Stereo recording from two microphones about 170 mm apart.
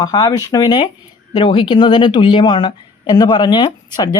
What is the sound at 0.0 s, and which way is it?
Speech, 20° left (ahead or behind).